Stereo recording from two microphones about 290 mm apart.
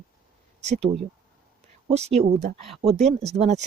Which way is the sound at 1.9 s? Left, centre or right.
Right.